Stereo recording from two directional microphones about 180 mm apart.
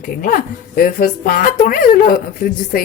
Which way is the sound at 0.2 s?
50° left (ahead or behind).